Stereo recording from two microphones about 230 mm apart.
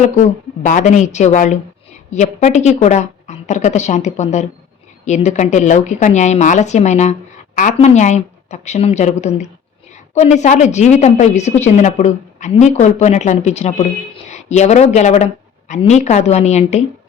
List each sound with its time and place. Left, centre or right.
0.0 s a woman's voice: left